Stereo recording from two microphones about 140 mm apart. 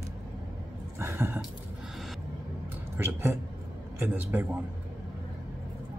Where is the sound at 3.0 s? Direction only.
15° right (ahead or behind).